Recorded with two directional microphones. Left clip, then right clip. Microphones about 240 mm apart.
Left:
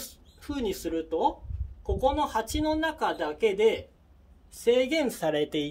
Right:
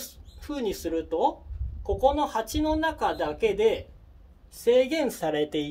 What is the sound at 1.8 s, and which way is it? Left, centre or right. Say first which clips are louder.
Speech: right 3 dB; centre.